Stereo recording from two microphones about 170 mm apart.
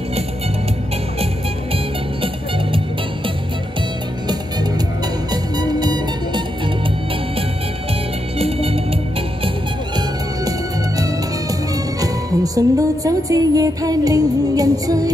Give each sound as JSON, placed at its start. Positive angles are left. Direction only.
{"t": 5.3, "sound": "music", "side_deg": -25}
{"t": 8.4, "sound": "music", "side_deg": -35}
{"t": 12.0, "sound": "speech", "side_deg": -20}